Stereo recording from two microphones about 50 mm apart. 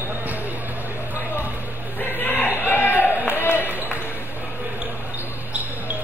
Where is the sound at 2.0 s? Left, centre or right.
Left.